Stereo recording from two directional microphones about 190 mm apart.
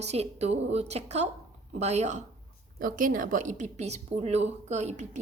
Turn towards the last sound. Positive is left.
turn(degrees=-35)  # may be behind; listen again after turning